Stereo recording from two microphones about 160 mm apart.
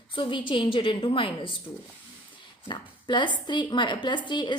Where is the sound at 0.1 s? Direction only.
30° left (ahead or behind).